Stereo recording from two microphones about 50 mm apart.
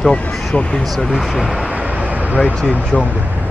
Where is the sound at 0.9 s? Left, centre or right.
Centre.